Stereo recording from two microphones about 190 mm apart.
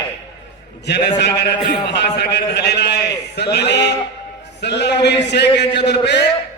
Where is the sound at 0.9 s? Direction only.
65° left (ahead or behind).